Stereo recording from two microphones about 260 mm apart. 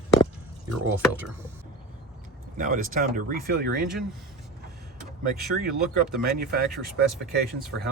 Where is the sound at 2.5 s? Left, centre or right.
Right.